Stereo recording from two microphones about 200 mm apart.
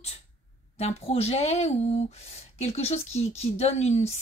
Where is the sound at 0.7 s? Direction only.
30° left (ahead or behind).